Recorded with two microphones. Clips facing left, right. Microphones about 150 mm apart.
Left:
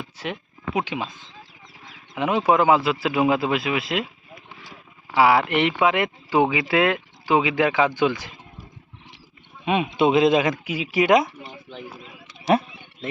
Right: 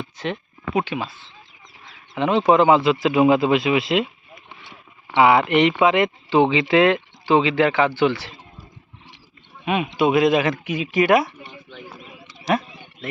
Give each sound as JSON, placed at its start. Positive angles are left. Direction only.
{"t": 0.0, "sound": "speech", "side_deg": 10}
{"t": 5.1, "sound": "speech", "side_deg": 0}
{"t": 10.0, "sound": "speech", "side_deg": 25}
{"t": 11.4, "sound": "a sound", "side_deg": 30}